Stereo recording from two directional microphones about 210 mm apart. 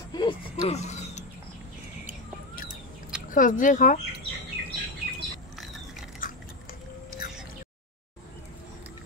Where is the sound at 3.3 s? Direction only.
40° left (ahead or behind).